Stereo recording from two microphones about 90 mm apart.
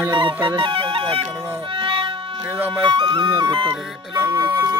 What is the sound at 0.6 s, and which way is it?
Speech, 85° right.